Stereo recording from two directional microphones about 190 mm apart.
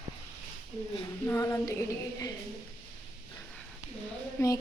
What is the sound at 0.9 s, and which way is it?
Speech, 15° left (ahead or behind).